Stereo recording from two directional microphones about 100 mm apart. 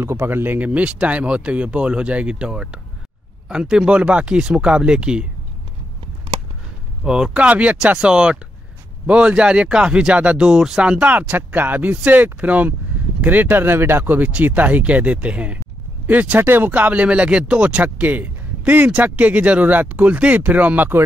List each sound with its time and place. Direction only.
0.0 s speech: 25° right (ahead or behind); by 5.2 s 10° right (ahead or behind)
7.1 s speech: 5° right (ahead or behind)